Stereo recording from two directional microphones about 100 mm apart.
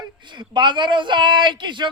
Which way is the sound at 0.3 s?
50° right (ahead or behind).